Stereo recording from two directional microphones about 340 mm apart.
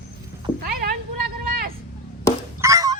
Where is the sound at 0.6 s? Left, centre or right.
Right.